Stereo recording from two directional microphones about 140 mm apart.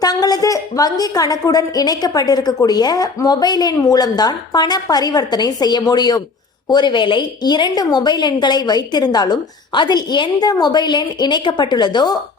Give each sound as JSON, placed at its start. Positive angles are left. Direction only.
{"t": 0.0, "sound": "a woman's voice", "side_deg": 25}